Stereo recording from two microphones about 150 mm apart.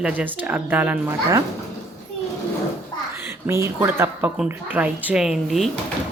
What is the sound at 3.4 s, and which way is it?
Speech, 15° right (ahead or behind).